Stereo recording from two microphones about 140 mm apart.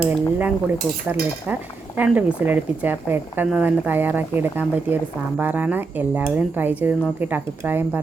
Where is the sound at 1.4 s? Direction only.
10° right (ahead or behind).